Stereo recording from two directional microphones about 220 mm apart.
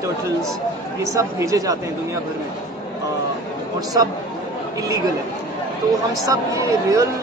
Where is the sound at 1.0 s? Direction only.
15° right (ahead or behind).